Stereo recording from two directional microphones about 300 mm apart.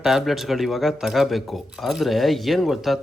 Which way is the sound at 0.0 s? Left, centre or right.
Centre.